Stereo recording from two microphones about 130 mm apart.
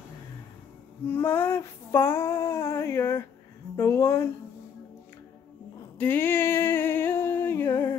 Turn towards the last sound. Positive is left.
turn(degrees=25)  # may be behind; listen again after turning